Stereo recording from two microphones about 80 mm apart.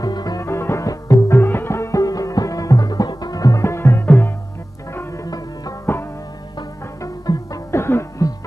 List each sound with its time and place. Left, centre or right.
0.0 s music: left
0.4 s music: left
0.8 s music: left
1.3 s music: left
3.6 s music: left
5.9 s music: left
7.3 s music: left
7.7 s music: left
8.2 s music: left